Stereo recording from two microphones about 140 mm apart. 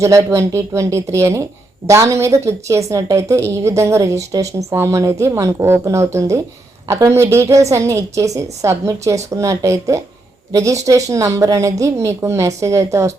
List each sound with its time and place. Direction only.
0.0 s a woman's voice: 20° right (ahead or behind)